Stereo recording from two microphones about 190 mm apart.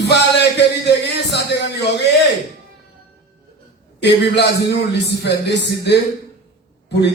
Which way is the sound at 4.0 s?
65° left (ahead or behind).